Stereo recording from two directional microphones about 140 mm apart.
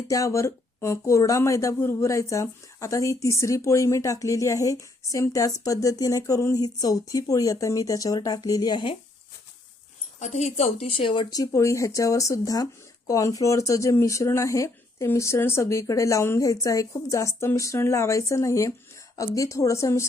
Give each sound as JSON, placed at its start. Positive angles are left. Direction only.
{"t": 0.1, "sound": "speech", "side_deg": 20}
{"t": 10.2, "sound": "speech", "side_deg": 55}